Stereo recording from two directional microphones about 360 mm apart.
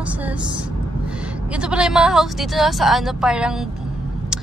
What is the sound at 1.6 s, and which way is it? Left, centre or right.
A woman's voice, centre.